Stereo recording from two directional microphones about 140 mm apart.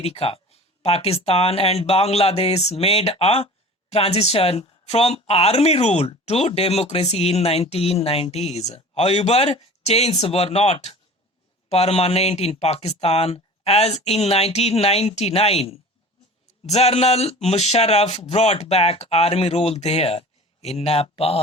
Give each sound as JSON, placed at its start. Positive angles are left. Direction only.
{"t": 0.0, "sound": "speech", "side_deg": 45}